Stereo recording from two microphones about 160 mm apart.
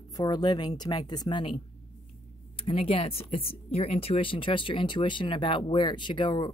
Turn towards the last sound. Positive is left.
turn(degrees=30)  # may be behind; listen again after turning